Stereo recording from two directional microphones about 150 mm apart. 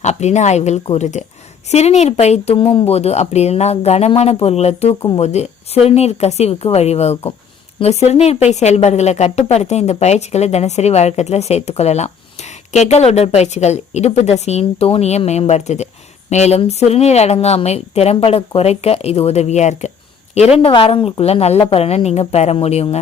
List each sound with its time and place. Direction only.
0.0 s a woman's voice: 50° left (ahead or behind)
20.6 s a woman's voice: 40° left (ahead or behind)